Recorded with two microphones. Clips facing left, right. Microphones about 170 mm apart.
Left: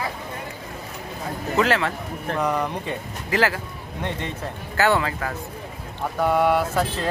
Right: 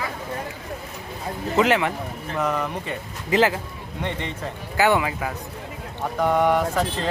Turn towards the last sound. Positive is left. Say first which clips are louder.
# even
turn(degrees=10)  # may be behind; listen again after turning